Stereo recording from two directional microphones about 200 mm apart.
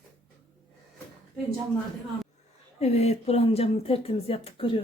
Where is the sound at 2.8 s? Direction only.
30° left (ahead or behind).